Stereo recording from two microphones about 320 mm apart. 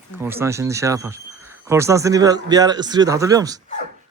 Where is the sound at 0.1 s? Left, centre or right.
Centre.